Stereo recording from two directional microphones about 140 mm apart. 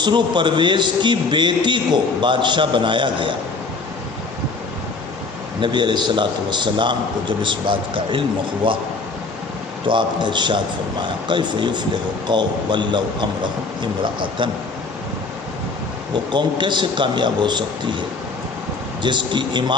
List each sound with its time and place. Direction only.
0.0 s a man's voice: 35° right (ahead or behind)
5.5 s a man's voice: 35° right (ahead or behind)
9.8 s a man's voice: 35° right (ahead or behind)
16.1 s a man's voice: 35° right (ahead or behind)
19.0 s a man's voice: 35° right (ahead or behind)